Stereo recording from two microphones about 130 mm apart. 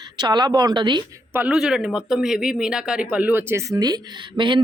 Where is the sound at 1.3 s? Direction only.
10° right (ahead or behind).